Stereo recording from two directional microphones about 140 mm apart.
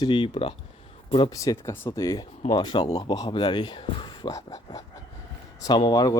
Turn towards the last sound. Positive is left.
turn(degrees=30)  # may be behind; listen again after turning